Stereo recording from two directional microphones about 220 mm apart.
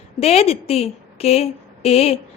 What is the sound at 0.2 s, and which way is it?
A woman's voice, 30° left (ahead or behind).